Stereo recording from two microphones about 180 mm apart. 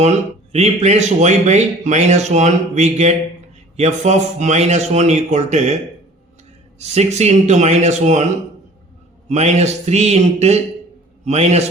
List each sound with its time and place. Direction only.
0.5 s speech: 35° right (ahead or behind)
6.7 s speech: 35° right (ahead or behind)
9.3 s speech: 35° right (ahead or behind)